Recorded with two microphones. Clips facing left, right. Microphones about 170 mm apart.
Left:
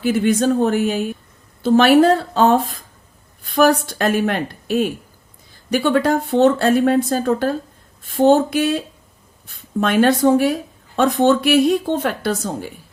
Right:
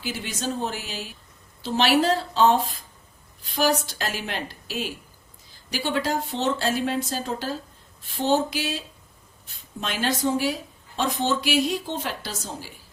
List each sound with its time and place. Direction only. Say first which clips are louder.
0.0 s a woman's voice: left 14 dB; 55° left (ahead or behind)
9.8 s speech: left 11 dB; 60° left (ahead or behind)